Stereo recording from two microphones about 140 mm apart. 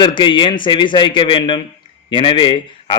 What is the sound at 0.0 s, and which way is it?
A man's voice, 35° left (ahead or behind).